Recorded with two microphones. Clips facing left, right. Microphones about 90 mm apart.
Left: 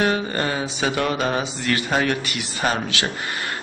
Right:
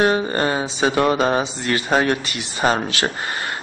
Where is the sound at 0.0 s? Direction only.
35° right (ahead or behind).